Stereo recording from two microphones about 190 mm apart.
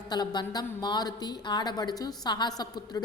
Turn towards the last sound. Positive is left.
turn(degrees=20)  # may be behind; listen again after turning